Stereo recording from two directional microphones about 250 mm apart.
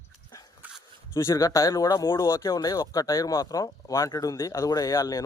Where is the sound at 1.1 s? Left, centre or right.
Centre.